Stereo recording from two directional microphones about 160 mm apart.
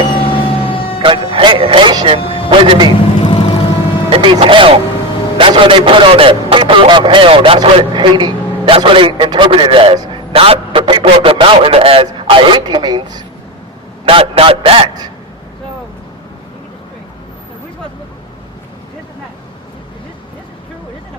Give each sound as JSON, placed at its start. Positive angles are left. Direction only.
{"t": 0.3, "sound": "vehicle", "side_deg": 35}
{"t": 1.0, "sound": "speech", "side_deg": -30}
{"t": 2.2, "sound": "vehicle", "side_deg": 35}
{"t": 2.5, "sound": "a man's voice", "side_deg": -30}
{"t": 3.2, "sound": "vehicle", "side_deg": 35}
{"t": 4.1, "sound": "a man's voice", "side_deg": -35}